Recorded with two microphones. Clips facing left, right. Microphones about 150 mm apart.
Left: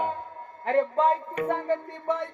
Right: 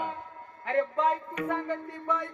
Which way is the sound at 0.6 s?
35° left (ahead or behind).